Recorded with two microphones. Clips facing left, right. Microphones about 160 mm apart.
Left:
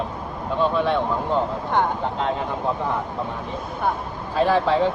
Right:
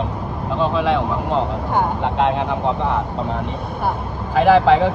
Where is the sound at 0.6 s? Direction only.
90° right.